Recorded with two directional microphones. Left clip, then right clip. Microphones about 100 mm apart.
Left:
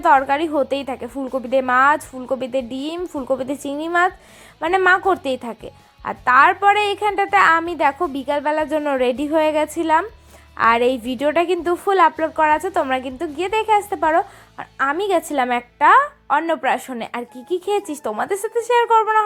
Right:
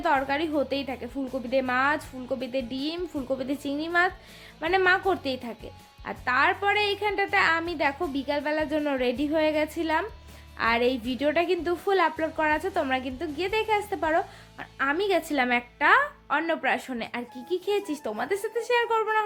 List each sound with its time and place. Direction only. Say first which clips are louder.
0.0 s a woman's voice: left 10 dB; 45° left (ahead or behind)